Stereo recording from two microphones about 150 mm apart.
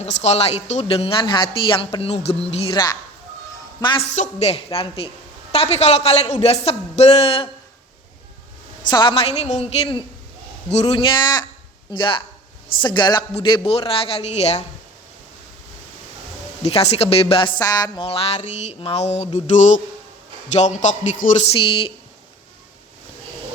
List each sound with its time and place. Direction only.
0.0 s music: 45° left (ahead or behind)
2.0 s speech: 45° left (ahead or behind)
2.7 s a woman's voice: 25° left (ahead or behind)
4.1 s speech: 50° left (ahead or behind)
8.9 s speech: 30° left (ahead or behind)
10.7 s music: 45° left (ahead or behind)
16.9 s music: 40° left (ahead or behind)
20.6 s speech: 55° left (ahead or behind)
21.2 s speech: 65° left (ahead or behind)
21.6 s music: 35° left (ahead or behind)